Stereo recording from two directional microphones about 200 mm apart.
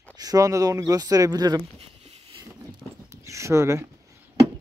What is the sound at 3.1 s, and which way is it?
Speech, 15° right (ahead or behind).